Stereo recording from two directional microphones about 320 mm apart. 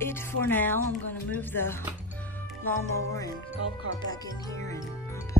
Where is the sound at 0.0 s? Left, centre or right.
Centre.